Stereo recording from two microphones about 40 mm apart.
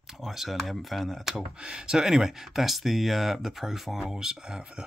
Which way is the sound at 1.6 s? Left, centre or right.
Centre.